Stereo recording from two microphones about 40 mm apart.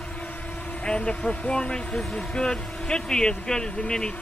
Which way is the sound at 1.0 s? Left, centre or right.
Left.